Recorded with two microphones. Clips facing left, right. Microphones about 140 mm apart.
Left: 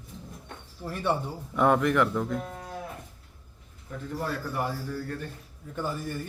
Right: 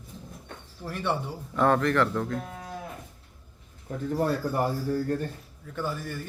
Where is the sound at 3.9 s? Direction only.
40° right (ahead or behind).